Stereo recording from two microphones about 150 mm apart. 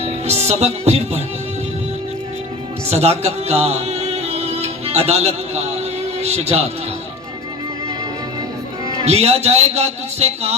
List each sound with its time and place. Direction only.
0.0 s speech: 45° right (ahead or behind)
2.9 s a man's voice: 45° right (ahead or behind)
9.0 s a man's voice: 45° right (ahead or behind)